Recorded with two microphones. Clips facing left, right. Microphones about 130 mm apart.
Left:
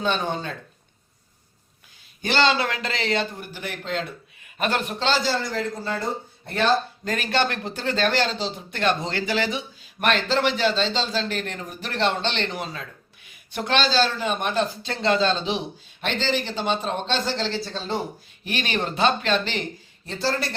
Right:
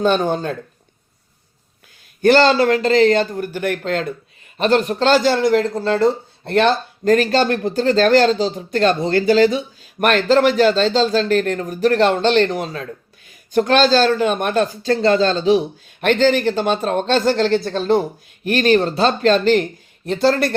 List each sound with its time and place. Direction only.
0.0 s speech: 50° right (ahead or behind)
2.2 s speech: 45° right (ahead or behind)
4.5 s speech: 35° right (ahead or behind); by 6.7 s 75° right (ahead or behind)
7.0 s speech: 45° right (ahead or behind)
16.0 s speech: 55° right (ahead or behind)
18.4 s speech: 45° right (ahead or behind)
20.1 s speech: 60° right (ahead or behind)